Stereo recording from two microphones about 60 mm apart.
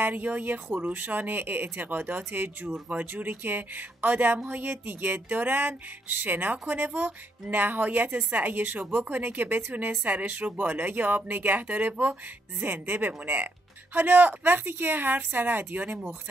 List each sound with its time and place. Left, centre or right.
0.0 s speech: right